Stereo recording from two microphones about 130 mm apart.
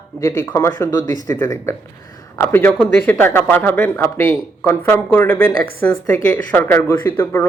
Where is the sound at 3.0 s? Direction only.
15° left (ahead or behind).